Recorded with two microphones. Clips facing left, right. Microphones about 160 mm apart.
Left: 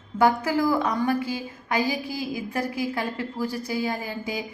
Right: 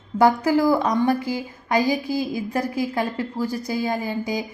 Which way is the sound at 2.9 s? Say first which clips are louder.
Right 4 dB; 35° right (ahead or behind).